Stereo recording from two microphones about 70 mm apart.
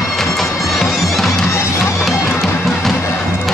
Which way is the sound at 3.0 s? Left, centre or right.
Left.